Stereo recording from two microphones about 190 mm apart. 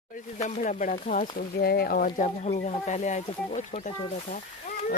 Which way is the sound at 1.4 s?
55° left (ahead or behind).